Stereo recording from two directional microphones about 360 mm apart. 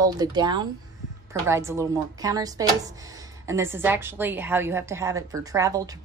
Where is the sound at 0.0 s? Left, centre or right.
Centre.